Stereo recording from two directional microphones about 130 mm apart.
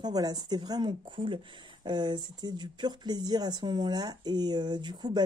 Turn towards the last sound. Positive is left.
turn(degrees=-35)  # may be behind; listen again after turning